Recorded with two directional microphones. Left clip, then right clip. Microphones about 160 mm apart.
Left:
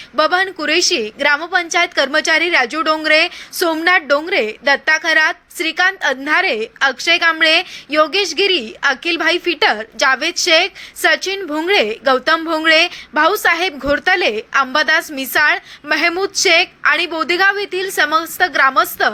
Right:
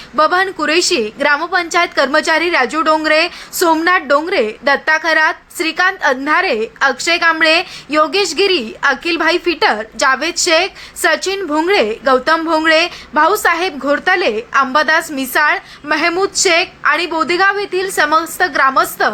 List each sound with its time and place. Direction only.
0.2 s a woman's voice: 15° left (ahead or behind)